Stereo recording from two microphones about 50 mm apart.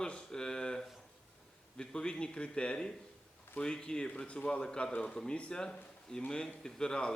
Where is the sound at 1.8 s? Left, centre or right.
Centre.